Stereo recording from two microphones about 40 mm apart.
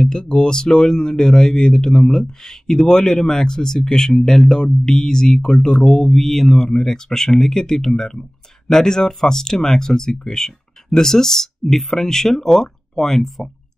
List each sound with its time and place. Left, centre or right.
0.0 s speech: centre